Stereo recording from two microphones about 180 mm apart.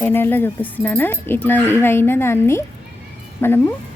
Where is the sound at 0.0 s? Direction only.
10° left (ahead or behind).